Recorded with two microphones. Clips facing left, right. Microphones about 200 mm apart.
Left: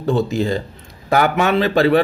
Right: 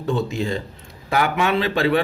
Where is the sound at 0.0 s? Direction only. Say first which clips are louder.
Left 5 dB; 35° left (ahead or behind).